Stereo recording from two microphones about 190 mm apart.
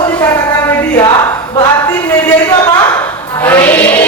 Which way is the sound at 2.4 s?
20° left (ahead or behind).